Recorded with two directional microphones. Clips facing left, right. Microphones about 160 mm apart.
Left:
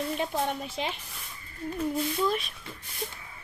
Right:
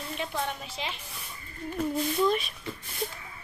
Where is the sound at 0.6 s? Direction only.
45° left (ahead or behind).